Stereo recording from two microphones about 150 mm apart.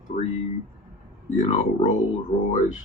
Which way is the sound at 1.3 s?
55° left (ahead or behind).